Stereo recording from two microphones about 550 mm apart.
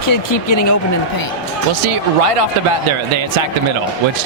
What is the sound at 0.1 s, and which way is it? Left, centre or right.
Speech, left.